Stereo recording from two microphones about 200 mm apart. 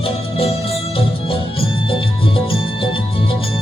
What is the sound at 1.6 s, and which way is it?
Music, 25° left (ahead or behind).